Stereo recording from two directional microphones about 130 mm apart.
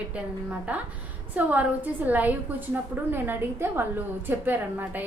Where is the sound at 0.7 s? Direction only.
10° right (ahead or behind).